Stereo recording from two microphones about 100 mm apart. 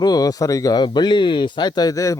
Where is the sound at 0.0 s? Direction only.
40° left (ahead or behind).